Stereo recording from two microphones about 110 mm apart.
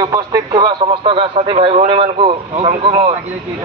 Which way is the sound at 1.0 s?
60° right (ahead or behind).